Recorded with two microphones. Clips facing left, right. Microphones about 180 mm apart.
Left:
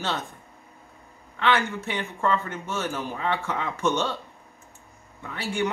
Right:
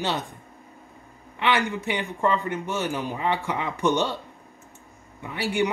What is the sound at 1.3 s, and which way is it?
Speech, 15° right (ahead or behind).